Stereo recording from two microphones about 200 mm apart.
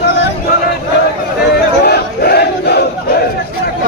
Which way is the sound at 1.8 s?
50° left (ahead or behind).